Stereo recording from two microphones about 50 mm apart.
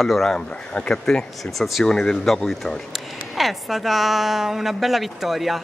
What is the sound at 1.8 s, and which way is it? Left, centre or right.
Speech, centre.